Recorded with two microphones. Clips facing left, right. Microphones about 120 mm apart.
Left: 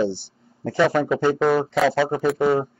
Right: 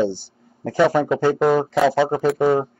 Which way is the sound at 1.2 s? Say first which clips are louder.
Right 2 dB; 10° right (ahead or behind).